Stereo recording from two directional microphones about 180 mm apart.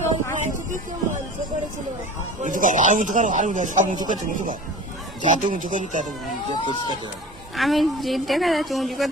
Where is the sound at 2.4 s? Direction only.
45° right (ahead or behind).